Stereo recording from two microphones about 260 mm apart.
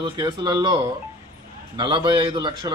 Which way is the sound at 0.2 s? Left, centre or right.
Centre.